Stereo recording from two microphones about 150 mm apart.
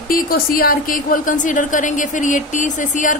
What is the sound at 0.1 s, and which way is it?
A woman's voice, 75° left (ahead or behind).